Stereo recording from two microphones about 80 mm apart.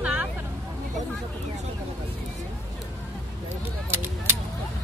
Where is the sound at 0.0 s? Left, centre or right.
Centre.